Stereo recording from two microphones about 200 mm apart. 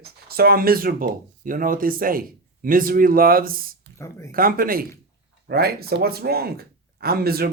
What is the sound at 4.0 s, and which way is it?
Speech, 15° left (ahead or behind).